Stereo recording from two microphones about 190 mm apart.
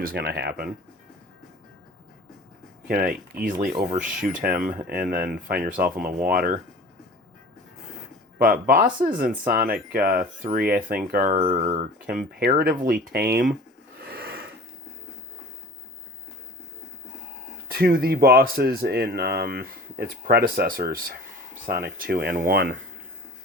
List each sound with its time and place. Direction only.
0.0 s speech: 55° right (ahead or behind)
2.8 s speech: 50° right (ahead or behind)
8.4 s speech: 50° right (ahead or behind)
11.3 s speech: 35° right (ahead or behind); by 13.5 s 55° right (ahead or behind)
14.0 s a sound: 55° right (ahead or behind)
17.7 s speech: 55° right (ahead or behind)